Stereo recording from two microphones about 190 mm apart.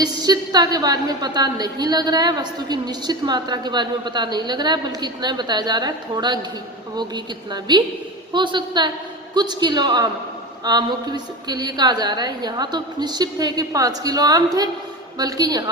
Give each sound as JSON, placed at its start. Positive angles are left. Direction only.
{"t": 0.0, "sound": "a woman's voice", "side_deg": -20}